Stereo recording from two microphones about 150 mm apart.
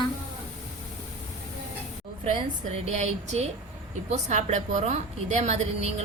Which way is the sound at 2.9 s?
50° right (ahead or behind).